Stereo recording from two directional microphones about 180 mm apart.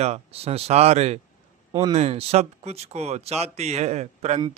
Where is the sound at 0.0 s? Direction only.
35° right (ahead or behind).